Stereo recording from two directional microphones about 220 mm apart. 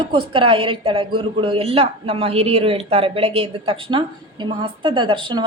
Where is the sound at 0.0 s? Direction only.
25° right (ahead or behind).